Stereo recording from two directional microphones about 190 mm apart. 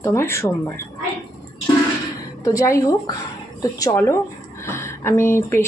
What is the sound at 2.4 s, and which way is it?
Speech, 15° left (ahead or behind).